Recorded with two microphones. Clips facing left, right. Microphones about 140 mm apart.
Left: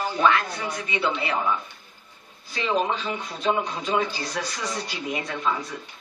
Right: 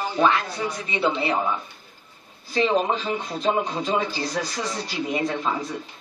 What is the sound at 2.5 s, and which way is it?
Speech, 35° right (ahead or behind).